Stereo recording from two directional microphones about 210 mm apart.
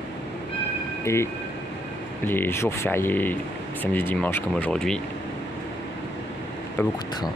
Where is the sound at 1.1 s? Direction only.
15° left (ahead or behind).